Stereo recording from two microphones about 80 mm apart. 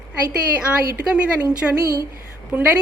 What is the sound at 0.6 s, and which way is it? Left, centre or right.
Speech, centre.